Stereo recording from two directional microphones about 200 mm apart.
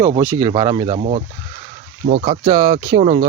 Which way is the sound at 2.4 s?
20° right (ahead or behind).